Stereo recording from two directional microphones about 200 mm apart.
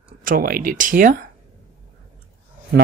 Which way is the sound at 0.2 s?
45° right (ahead or behind).